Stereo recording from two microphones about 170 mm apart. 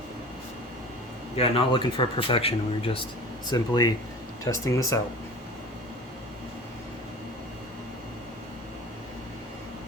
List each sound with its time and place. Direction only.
1.4 s speech: 30° left (ahead or behind)
3.4 s speech: 25° left (ahead or behind)